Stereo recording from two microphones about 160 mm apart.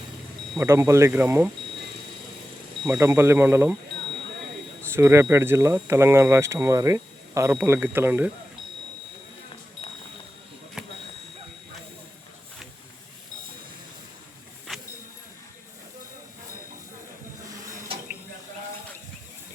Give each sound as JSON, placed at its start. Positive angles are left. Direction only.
{"t": 0.6, "sound": "speech", "side_deg": -15}
{"t": 3.0, "sound": "speech", "side_deg": -15}
{"t": 4.9, "sound": "speech", "side_deg": -15}
{"t": 10.8, "sound": "a sound", "side_deg": -5}